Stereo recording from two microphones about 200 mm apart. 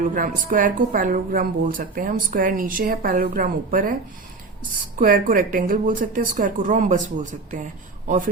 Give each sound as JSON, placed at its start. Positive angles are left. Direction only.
{"t": 0.0, "sound": "a woman's voice", "side_deg": -45}
{"t": 4.9, "sound": "speech", "side_deg": -40}